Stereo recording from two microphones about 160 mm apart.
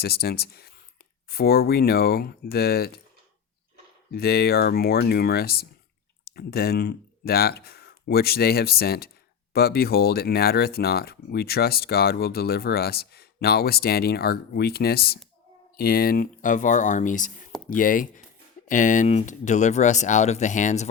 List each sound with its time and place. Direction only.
0.0 s speech: 75° left (ahead or behind)
4.1 s speech: 75° left (ahead or behind); by 20.8 s 50° left (ahead or behind)